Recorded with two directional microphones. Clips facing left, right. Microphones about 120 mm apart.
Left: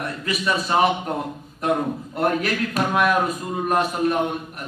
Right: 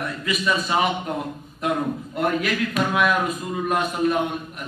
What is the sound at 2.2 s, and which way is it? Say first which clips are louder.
A man's voice: left 1 dB; 40° left (ahead or behind).